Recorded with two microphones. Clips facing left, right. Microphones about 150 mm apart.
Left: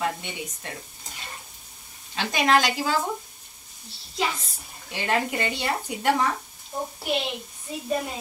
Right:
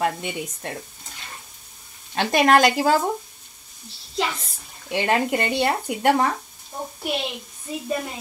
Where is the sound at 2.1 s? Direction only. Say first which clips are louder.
Right 5 dB; 55° right (ahead or behind).